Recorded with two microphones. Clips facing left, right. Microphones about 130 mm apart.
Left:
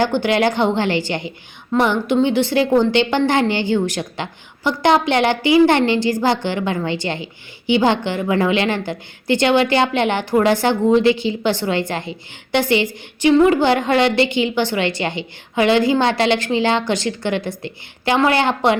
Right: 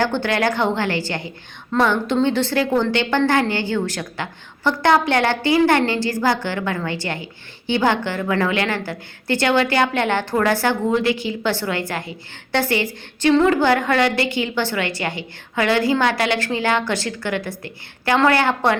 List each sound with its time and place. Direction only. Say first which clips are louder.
0.0 s a woman's voice: left 3 dB; 15° left (ahead or behind)